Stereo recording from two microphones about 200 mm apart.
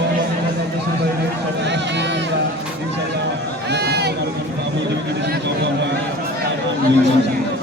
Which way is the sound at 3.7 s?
55° right (ahead or behind).